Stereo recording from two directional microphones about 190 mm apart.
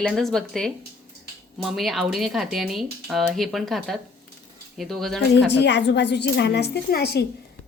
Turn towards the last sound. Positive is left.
turn(degrees=55)  # may be behind; listen again after turning